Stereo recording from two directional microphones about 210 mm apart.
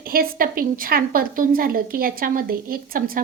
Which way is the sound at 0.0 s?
45° right (ahead or behind).